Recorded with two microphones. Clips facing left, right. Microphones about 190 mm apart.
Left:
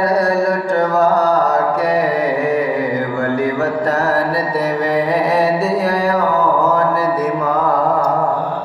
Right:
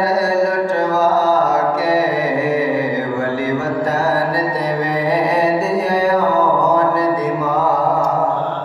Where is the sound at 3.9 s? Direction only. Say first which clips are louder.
Even; 15° right (ahead or behind).